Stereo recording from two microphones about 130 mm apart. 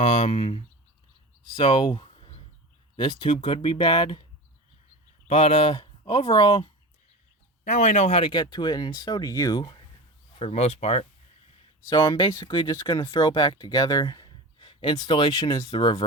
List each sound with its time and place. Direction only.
0.0 s speech: 50° left (ahead or behind)
1.5 s a sound: 40° left (ahead or behind)
2.9 s speech: 40° left (ahead or behind)
5.3 s speech: 45° left (ahead or behind)
7.6 s speech: 65° left (ahead or behind)
8.2 s speech: 35° left (ahead or behind)
10.3 s speech: 50° left (ahead or behind)
11.9 s speech: 35° left (ahead or behind)
14.6 s speech: 40° left (ahead or behind)